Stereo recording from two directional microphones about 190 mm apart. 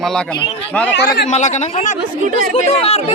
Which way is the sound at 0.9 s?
60° left (ahead or behind).